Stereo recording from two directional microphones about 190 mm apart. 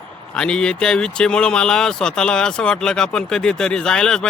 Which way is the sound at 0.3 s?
5° left (ahead or behind).